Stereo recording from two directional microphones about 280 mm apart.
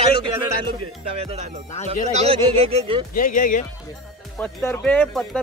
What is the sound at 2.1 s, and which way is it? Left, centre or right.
Speech, right.